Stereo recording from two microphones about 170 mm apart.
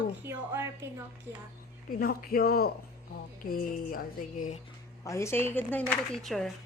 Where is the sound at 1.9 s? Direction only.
60° left (ahead or behind).